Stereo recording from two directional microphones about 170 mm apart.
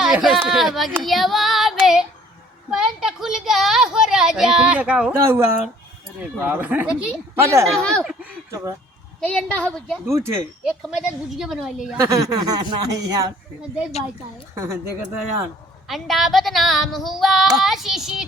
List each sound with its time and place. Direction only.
0.0 s female singing: centre (ahead or behind)
1.0 s child singing: centre (ahead or behind)
2.6 s a woman's voice: centre (ahead or behind)
7.8 s female singing: 5° left (ahead or behind)
9.2 s a woman's voice: 5° left (ahead or behind)
10.6 s female singing: 5° right (ahead or behind)
11.9 s speech: 20° right (ahead or behind)
14.5 s speech: 20° right (ahead or behind)
15.9 s female singing: centre (ahead or behind)